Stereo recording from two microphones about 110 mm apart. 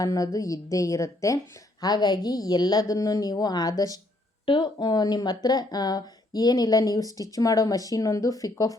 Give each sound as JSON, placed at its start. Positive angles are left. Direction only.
{"t": 0.0, "sound": "a woman's voice", "side_deg": 30}
{"t": 4.4, "sound": "speech", "side_deg": 50}